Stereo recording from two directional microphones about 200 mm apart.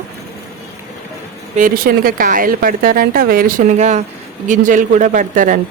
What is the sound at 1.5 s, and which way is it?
A woman's voice, 45° right (ahead or behind).